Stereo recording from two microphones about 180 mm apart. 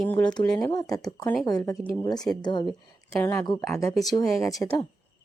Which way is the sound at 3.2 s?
10° left (ahead or behind).